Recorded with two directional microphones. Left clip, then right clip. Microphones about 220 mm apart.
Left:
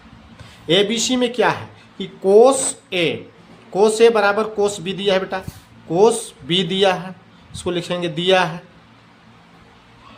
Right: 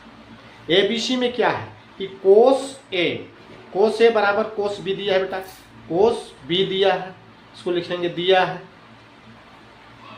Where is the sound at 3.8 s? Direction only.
35° left (ahead or behind).